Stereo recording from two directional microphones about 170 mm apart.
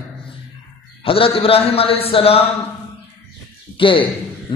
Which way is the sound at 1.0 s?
35° left (ahead or behind).